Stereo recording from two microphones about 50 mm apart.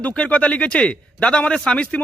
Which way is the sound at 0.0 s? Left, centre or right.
Left.